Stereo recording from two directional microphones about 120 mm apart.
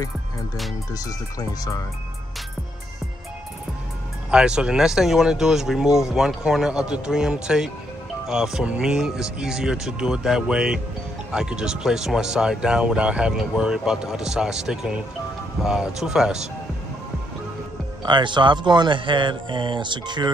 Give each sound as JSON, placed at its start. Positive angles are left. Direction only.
{"t": 4.3, "sound": "speech", "side_deg": -5}
{"t": 18.0, "sound": "speech", "side_deg": -40}